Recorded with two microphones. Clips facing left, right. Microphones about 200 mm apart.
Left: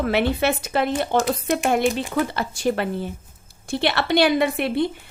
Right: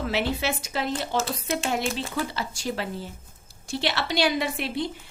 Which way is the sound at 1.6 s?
55° left (ahead or behind).